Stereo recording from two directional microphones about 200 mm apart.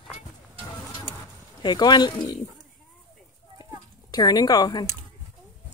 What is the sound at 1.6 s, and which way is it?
Speech, 20° left (ahead or behind).